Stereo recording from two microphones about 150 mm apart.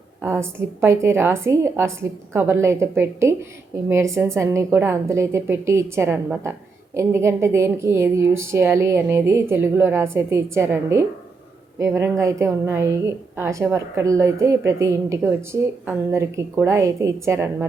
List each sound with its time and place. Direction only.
0.2 s a woman's voice: 15° right (ahead or behind)